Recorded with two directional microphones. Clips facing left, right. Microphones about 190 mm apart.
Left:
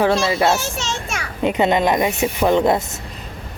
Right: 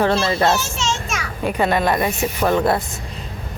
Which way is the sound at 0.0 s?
10° left (ahead or behind).